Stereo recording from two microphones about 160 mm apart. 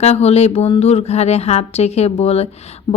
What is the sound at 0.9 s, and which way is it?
Speech, 40° left (ahead or behind).